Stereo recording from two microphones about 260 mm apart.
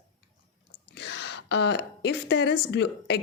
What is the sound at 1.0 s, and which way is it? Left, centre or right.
A woman's voice, left.